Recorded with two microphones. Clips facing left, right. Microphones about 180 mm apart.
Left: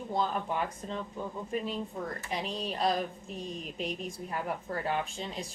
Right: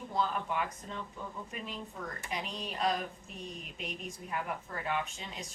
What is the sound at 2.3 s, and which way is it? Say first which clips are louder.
A woman's voice: left 4 dB; 35° left (ahead or behind).